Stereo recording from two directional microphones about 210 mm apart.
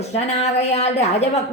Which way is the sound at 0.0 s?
30° left (ahead or behind).